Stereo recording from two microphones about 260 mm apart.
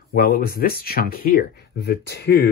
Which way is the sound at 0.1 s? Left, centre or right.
Left.